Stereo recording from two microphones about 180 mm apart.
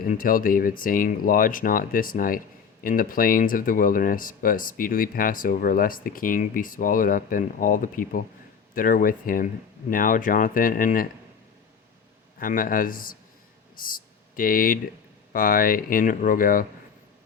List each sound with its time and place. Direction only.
0.0 s speech: 50° left (ahead or behind)
12.4 s speech: 50° left (ahead or behind)